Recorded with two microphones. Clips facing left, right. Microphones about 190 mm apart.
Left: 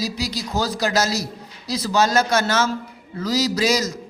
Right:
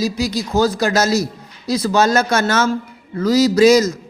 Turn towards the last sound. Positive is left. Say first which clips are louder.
# right 9 dB
turn(degrees=-50)  # may be behind; listen again after turning